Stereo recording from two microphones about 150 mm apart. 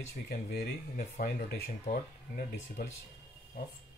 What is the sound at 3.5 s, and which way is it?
Speech, 90° left.